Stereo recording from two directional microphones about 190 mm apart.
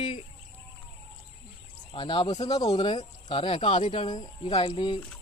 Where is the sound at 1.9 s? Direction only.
25° left (ahead or behind).